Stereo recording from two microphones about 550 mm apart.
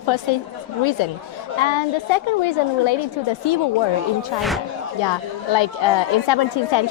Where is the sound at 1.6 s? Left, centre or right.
Left.